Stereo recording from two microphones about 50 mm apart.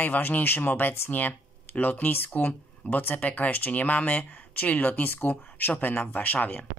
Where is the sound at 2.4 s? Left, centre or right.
Left.